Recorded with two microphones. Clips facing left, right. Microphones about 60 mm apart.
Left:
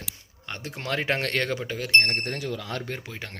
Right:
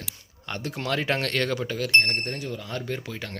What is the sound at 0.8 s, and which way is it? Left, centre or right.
Speech, left.